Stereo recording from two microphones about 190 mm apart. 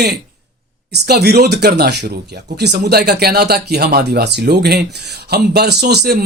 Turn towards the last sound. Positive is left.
turn(degrees=-60)  # may be behind; listen again after turning